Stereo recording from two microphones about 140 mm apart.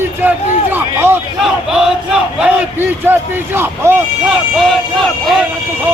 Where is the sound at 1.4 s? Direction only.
5° right (ahead or behind).